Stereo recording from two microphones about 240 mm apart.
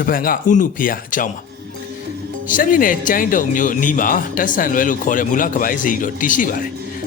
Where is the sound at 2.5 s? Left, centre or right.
Left.